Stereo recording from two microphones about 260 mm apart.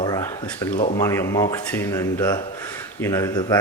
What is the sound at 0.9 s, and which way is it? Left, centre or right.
Speech, centre.